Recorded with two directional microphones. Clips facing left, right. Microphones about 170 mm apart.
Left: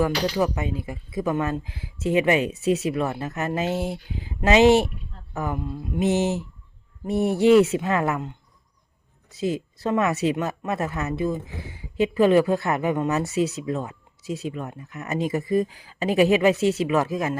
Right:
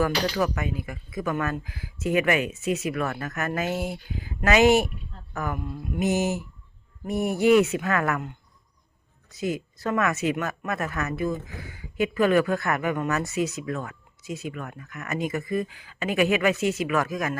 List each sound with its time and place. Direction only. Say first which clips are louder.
0.0 s speech: left 2 dB; 25° left (ahead or behind)
9.3 s speech: left 3 dB; 30° left (ahead or behind)